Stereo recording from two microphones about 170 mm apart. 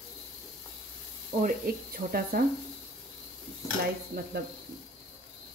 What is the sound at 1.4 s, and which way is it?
Speech, 55° right (ahead or behind).